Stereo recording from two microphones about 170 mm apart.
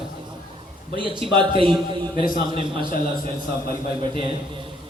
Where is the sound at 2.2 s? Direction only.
55° left (ahead or behind).